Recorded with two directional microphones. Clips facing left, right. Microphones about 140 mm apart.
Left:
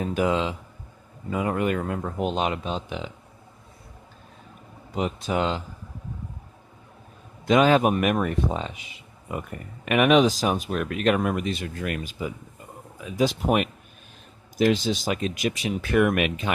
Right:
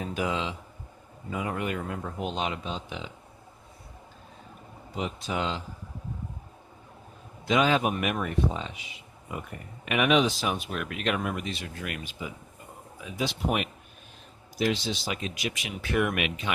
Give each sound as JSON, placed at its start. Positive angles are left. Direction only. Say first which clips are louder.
{"t": 0.1, "sound": "speech", "louder": "left 6 dB", "side_deg": 50}
{"t": 4.9, "sound": "speech", "louder": "left 6 dB", "side_deg": 50}
{"t": 7.4, "sound": "speech", "louder": "left 6 dB", "side_deg": 50}
{"t": 9.8, "sound": "speech", "louder": "left 5 dB", "side_deg": 50}